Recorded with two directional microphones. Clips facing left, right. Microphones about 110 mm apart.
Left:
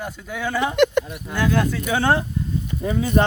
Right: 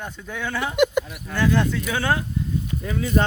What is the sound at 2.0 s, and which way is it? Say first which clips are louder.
Speech: left 5 dB; 30° left (ahead or behind).